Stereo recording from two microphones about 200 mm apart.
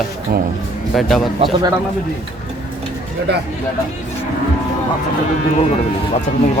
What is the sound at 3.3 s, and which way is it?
Speech, 55° right (ahead or behind).